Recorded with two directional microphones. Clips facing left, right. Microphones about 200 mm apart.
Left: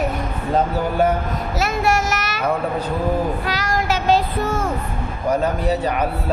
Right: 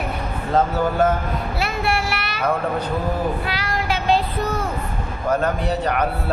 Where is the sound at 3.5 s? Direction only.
45° left (ahead or behind).